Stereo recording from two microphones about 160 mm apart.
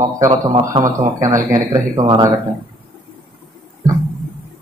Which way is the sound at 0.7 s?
35° right (ahead or behind).